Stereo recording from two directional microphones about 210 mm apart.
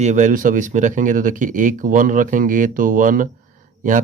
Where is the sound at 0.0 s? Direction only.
35° right (ahead or behind).